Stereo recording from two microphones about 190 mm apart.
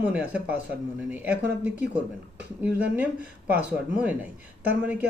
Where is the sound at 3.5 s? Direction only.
10° right (ahead or behind).